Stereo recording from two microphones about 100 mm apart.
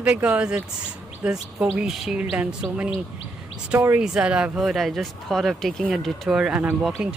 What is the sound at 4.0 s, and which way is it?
A man's voice, 10° right (ahead or behind).